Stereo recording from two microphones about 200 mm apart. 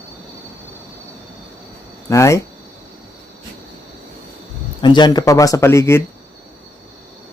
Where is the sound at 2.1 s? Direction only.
15° left (ahead or behind).